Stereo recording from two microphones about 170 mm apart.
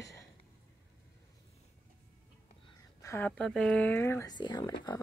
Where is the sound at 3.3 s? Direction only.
5° left (ahead or behind).